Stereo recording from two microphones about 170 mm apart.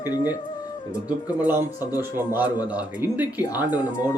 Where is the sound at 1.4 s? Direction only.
10° right (ahead or behind).